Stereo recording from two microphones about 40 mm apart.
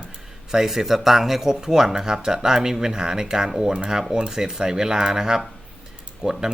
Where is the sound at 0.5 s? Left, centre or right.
Centre.